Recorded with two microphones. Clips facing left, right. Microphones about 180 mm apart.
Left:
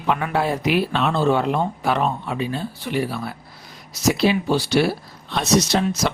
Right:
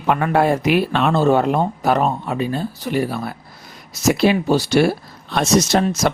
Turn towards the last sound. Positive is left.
turn(degrees=-50)  # may be behind; listen again after turning